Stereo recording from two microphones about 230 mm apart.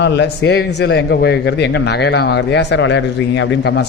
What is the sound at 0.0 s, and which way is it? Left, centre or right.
A man's voice, left.